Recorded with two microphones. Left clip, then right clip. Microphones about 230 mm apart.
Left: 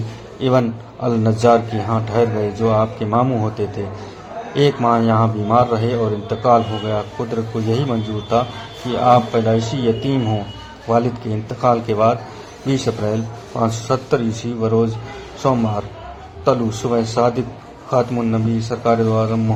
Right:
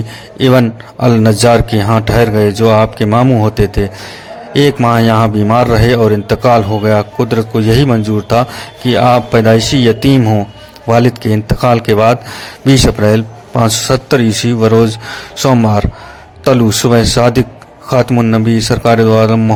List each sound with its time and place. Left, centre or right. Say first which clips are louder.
0.3 s a man's voice: right 7 dB; right
16.8 s a man's voice: right 6 dB; right